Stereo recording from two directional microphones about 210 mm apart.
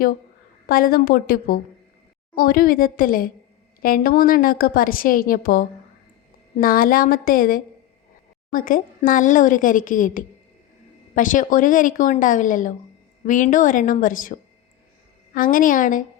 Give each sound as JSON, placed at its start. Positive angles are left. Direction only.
{"t": 0.7, "sound": "a woman's voice", "side_deg": 45}